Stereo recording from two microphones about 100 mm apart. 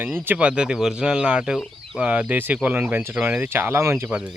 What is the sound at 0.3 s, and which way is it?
Speech, 10° right (ahead or behind).